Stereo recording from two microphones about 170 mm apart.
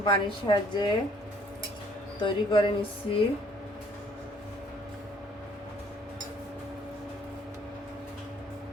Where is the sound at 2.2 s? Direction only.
30° left (ahead or behind).